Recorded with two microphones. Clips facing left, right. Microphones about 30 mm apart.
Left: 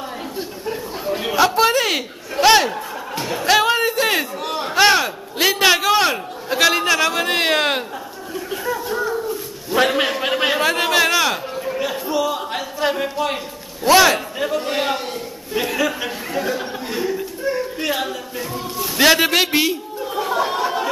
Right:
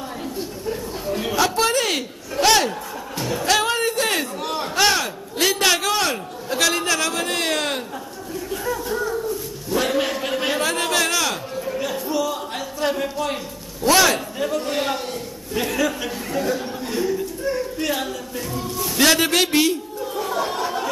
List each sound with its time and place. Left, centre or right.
0.4 s a sound: centre
4.6 s a man's voice: centre
8.6 s speech: centre
9.7 s a man's voice: left